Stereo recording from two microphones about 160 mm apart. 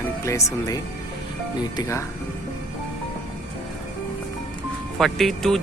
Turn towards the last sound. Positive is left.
turn(degrees=0)  # may be behind; listen again after turning